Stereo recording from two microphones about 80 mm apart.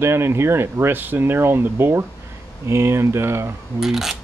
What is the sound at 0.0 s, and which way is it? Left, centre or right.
Speech, right.